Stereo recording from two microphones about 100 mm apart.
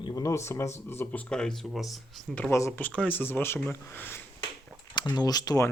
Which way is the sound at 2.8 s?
15° left (ahead or behind).